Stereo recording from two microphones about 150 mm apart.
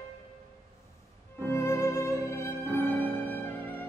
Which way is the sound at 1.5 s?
20° left (ahead or behind).